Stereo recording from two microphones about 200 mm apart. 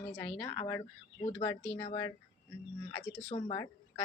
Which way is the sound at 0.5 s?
15° left (ahead or behind).